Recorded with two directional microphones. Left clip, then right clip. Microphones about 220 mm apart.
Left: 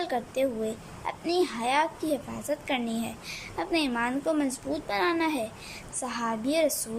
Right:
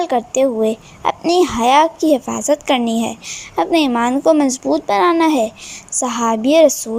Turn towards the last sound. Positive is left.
turn(degrees=-30)  # may be behind; listen again after turning